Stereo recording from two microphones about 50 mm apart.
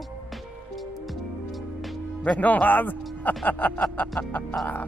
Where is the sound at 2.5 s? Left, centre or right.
Left.